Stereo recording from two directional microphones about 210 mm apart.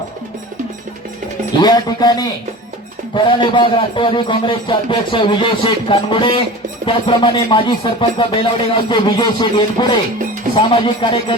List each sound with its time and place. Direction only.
1.5 s a man's voice: 20° left (ahead or behind)